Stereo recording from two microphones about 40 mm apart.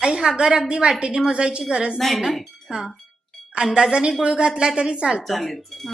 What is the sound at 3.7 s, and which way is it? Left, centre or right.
A woman's voice, centre.